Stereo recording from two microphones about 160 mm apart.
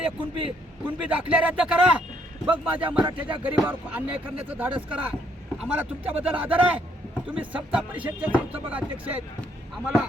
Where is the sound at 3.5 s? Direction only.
10° right (ahead or behind).